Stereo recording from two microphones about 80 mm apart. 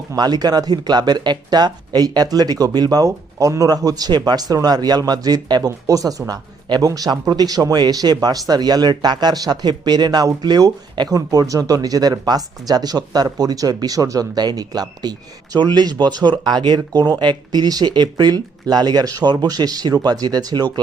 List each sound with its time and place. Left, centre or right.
0.2 s speech: right